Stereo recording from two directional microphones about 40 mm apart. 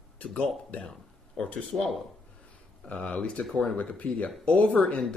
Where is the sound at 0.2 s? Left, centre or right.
Left.